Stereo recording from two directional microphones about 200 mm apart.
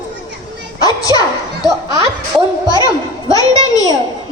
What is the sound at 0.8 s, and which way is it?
Speech, 20° left (ahead or behind).